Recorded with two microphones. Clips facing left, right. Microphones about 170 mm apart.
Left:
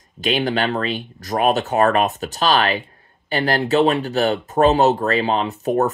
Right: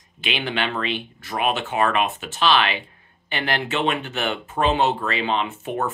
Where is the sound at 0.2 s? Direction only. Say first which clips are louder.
Left 6 dB; 40° left (ahead or behind).